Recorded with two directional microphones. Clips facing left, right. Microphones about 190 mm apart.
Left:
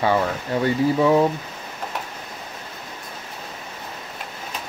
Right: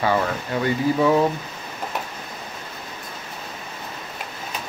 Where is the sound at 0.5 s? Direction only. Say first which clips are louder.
Left 3 dB; 35° left (ahead or behind).